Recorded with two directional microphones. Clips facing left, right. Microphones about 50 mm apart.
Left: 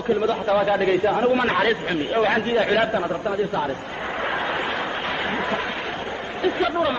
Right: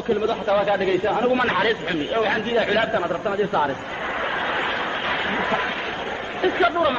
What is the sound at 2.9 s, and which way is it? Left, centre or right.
Speech, centre.